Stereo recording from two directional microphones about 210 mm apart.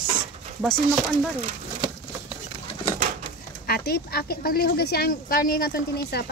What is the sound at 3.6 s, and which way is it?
Speech, 45° left (ahead or behind).